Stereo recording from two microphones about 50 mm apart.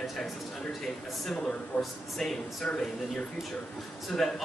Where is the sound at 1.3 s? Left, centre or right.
Centre.